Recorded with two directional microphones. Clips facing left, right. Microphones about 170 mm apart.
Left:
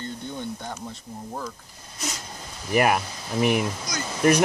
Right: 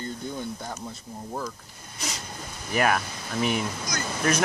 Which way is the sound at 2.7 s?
10° left (ahead or behind).